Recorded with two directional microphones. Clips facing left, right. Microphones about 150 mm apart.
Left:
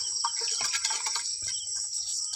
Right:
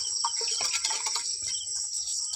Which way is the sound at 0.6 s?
25° right (ahead or behind).